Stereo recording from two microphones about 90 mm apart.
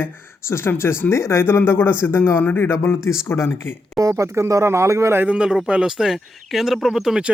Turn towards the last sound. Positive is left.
turn(degrees=-5)  # may be behind; listen again after turning